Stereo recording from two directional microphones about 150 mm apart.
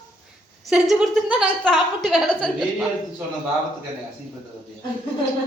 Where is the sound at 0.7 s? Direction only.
5° right (ahead or behind).